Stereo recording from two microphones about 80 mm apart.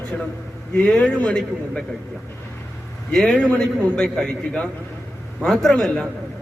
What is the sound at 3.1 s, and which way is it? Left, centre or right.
A man's voice, centre.